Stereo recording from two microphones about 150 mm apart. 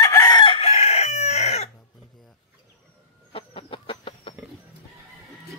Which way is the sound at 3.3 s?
35° left (ahead or behind).